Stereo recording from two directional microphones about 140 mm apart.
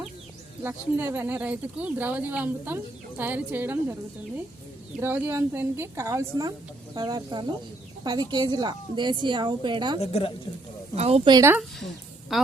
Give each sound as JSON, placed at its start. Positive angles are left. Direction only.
{"t": 0.6, "sound": "speech", "side_deg": -15}
{"t": 4.9, "sound": "a woman's voice", "side_deg": -15}
{"t": 10.0, "sound": "a woman's voice", "side_deg": 45}
{"t": 10.9, "sound": "speech", "side_deg": -50}
{"t": 11.3, "sound": "speech", "side_deg": -25}
{"t": 12.3, "sound": "a woman's voice", "side_deg": -5}